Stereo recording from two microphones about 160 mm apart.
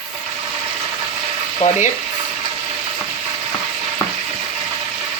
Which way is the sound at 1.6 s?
40° left (ahead or behind).